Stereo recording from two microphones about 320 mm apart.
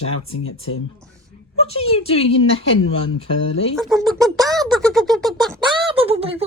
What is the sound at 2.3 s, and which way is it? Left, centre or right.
Speech, left.